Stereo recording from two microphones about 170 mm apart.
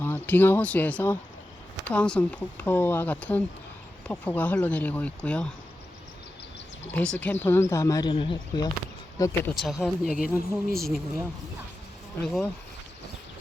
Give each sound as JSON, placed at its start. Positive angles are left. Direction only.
{"t": 0.0, "sound": "speech", "side_deg": 10}
{"t": 6.9, "sound": "speech", "side_deg": 10}
{"t": 9.6, "sound": "speech", "side_deg": 0}